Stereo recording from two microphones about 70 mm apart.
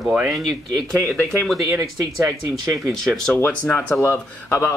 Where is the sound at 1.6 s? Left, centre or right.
Right.